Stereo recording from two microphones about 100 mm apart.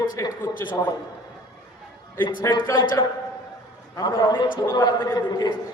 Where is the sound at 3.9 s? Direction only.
30° left (ahead or behind).